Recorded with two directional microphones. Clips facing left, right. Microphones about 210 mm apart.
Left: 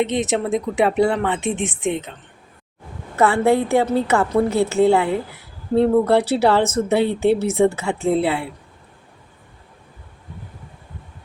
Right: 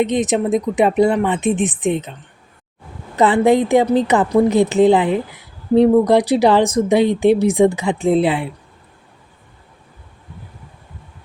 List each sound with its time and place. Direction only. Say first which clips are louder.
0.0 s a woman's voice: right 3 dB; 15° right (ahead or behind)
3.2 s a woman's voice: right 3 dB; 15° right (ahead or behind)